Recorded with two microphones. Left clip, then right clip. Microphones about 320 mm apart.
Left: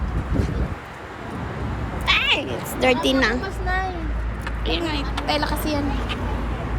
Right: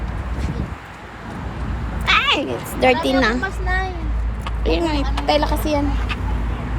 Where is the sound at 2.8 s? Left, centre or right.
Centre.